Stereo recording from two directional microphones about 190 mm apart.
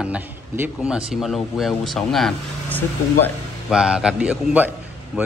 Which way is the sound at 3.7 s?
5° right (ahead or behind).